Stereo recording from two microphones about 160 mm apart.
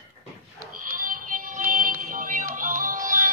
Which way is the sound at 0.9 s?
55° right (ahead or behind).